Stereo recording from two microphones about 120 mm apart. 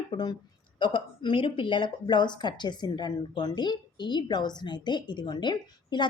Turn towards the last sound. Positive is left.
turn(degrees=40)  # may be behind; listen again after turning